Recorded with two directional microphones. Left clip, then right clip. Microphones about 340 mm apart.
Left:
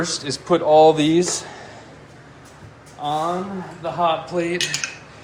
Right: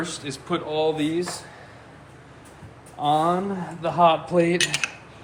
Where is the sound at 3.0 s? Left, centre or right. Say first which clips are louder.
Right 2 dB; right.